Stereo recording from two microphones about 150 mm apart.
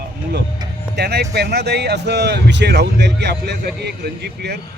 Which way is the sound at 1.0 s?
90° right.